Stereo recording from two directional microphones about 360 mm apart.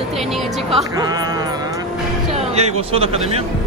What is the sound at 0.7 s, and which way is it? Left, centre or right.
Speech, centre.